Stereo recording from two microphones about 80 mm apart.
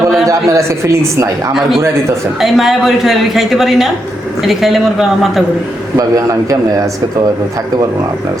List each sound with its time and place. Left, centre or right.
0.3 s speech: right
2.4 s speech: centre
6.0 s a man's voice: right